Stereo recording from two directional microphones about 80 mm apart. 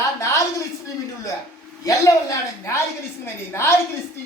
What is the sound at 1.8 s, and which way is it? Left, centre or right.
A woman's voice, left.